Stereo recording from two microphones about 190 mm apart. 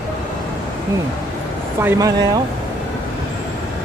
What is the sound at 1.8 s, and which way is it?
Speech, 15° right (ahead or behind).